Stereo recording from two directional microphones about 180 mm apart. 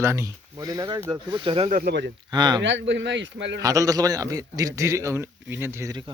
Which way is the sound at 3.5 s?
20° right (ahead or behind).